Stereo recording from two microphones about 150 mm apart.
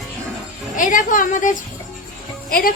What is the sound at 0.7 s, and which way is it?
Speech, 60° left (ahead or behind).